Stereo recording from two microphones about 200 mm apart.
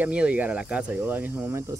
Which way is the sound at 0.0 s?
5° right (ahead or behind).